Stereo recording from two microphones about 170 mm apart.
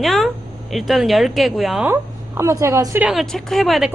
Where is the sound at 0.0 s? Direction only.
Centre (ahead or behind).